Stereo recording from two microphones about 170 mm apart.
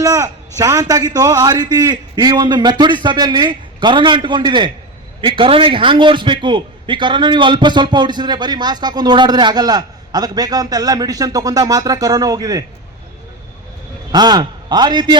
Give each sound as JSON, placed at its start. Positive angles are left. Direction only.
{"t": 0.0, "sound": "a man's voice", "side_deg": -20}
{"t": 14.1, "sound": "a man's voice", "side_deg": -25}